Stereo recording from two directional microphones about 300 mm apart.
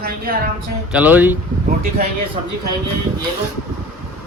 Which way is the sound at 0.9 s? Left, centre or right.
Centre.